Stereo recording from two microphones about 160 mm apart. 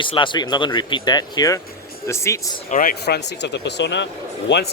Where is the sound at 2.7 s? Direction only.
60° left (ahead or behind); by 4.1 s 90° left.